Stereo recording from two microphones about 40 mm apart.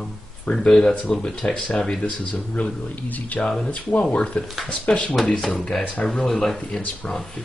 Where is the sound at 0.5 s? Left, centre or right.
Centre.